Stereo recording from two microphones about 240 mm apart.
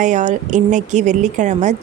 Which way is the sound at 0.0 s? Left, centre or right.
Right.